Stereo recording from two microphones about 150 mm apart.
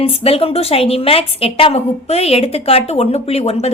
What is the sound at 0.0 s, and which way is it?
A woman's voice, 40° left (ahead or behind).